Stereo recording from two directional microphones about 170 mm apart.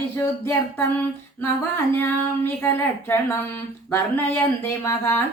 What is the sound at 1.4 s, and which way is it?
Speech, 15° left (ahead or behind).